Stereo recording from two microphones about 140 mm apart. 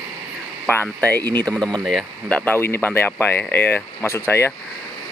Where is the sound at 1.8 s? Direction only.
Centre (ahead or behind).